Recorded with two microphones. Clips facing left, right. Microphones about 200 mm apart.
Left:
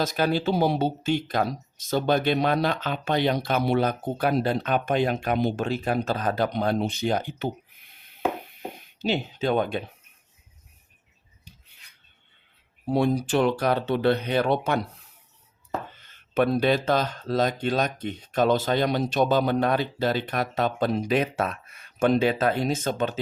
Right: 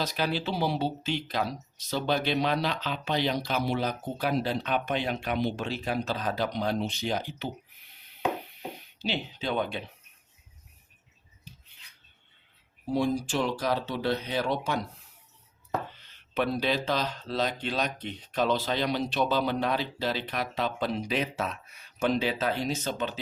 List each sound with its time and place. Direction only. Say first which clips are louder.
0.0 s speech: left 6 dB; 45° left (ahead or behind)
9.0 s speech: left 7 dB; 45° left (ahead or behind)
12.9 s speech: left 5 dB; 60° left (ahead or behind)
16.0 s speech: left 10 dB; 50° left (ahead or behind)